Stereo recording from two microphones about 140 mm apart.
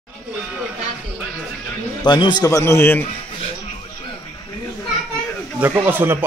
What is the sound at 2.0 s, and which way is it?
Speech, 35° left (ahead or behind).